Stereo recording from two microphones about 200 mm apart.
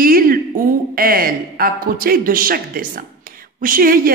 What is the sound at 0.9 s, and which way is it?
Speech, 45° right (ahead or behind).